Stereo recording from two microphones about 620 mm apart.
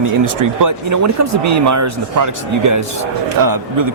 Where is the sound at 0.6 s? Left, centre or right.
Right.